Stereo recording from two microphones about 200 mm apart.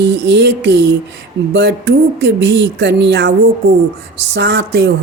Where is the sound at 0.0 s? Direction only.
60° right (ahead or behind).